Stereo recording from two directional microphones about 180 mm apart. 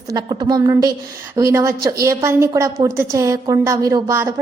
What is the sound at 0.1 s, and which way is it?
A woman's voice, 20° right (ahead or behind).